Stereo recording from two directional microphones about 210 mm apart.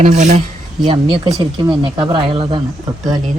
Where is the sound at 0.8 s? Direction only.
25° right (ahead or behind).